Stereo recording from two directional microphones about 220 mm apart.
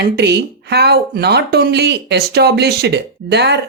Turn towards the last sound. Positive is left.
turn(degrees=-50)  # may be behind; listen again after turning